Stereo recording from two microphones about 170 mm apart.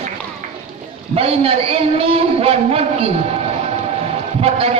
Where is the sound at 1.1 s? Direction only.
35° right (ahead or behind).